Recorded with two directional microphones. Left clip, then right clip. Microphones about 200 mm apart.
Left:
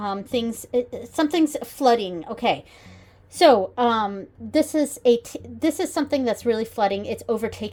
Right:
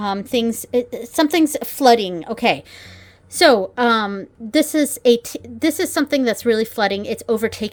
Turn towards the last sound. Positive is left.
turn(degrees=-25)  # may be behind; listen again after turning